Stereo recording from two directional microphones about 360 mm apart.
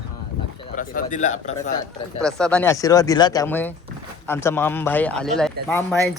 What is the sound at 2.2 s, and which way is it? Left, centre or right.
A man's voice, centre.